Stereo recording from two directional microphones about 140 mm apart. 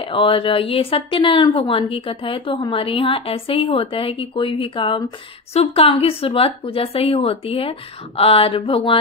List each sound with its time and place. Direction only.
0.0 s a woman's voice: 40° left (ahead or behind)